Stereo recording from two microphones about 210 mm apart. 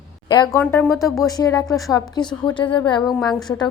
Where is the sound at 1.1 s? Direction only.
15° left (ahead or behind).